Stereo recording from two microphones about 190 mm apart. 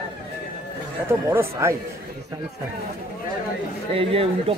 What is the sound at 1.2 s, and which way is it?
Speech, 15° right (ahead or behind).